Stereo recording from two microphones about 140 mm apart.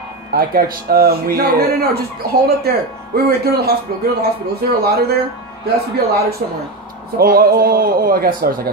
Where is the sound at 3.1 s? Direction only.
90° right.